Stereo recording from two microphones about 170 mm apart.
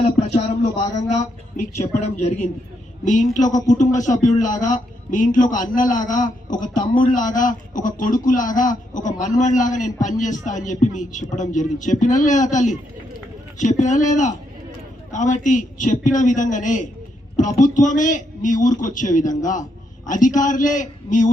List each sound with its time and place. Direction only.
0.0 s a sound: 40° left (ahead or behind)
1.9 s a man's voice: 40° left (ahead or behind)
15.1 s a woman's voice: 50° left (ahead or behind)